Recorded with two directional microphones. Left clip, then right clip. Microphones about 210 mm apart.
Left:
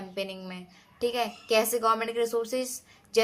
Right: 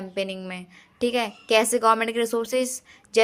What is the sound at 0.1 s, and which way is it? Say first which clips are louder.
A woman's voice: right 6 dB; 35° right (ahead or behind).